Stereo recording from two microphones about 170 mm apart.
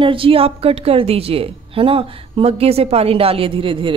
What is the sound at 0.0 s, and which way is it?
A woman's voice, 30° right (ahead or behind).